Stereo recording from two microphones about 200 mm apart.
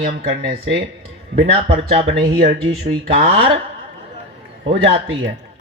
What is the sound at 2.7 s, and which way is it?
Speech, 30° right (ahead or behind).